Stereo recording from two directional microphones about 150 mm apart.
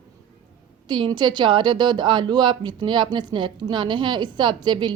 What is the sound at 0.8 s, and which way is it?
A woman's voice, 30° right (ahead or behind).